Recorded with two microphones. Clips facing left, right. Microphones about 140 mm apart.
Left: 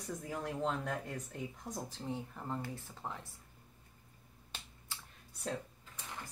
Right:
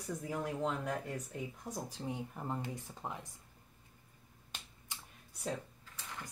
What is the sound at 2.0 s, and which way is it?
Speech, 15° right (ahead or behind).